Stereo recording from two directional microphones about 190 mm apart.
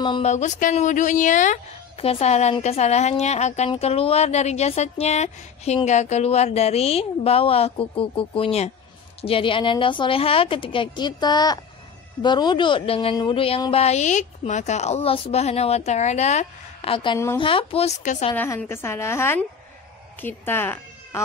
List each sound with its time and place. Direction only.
0.0 s speech: 25° left (ahead or behind)
0.3 s a woman's voice: 40° left (ahead or behind)
18.3 s a woman's voice: 10° left (ahead or behind)